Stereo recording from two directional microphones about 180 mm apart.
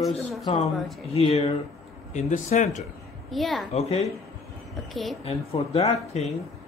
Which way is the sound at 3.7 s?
35° left (ahead or behind).